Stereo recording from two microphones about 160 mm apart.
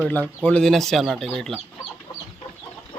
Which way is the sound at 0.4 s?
5° left (ahead or behind).